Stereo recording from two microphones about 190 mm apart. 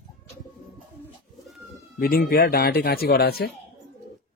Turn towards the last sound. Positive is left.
turn(degrees=55)  # may be behind; listen again after turning